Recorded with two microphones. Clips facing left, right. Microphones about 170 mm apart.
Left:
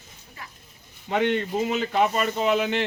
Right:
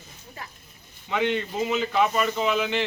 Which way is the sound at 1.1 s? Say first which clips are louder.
Left 2 dB; 50° left (ahead or behind).